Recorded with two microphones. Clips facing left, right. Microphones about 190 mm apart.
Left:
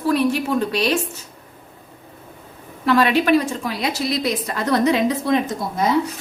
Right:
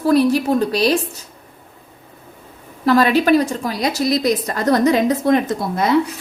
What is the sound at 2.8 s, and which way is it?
A woman's voice, 40° right (ahead or behind).